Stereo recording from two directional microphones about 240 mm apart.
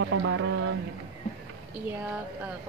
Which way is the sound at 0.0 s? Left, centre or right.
Right.